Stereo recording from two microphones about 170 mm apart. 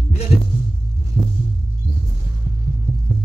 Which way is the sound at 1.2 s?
25° right (ahead or behind).